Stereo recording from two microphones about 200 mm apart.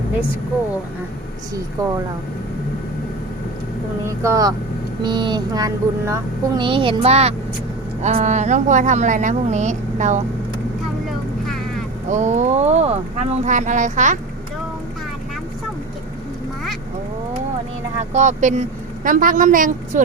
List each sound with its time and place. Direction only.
1.8 s speech: 20° right (ahead or behind)
4.0 s speech: 15° right (ahead or behind); by 10.2 s 35° right (ahead or behind)
12.0 s speech: 35° right (ahead or behind)
17.9 s speech: 35° right (ahead or behind)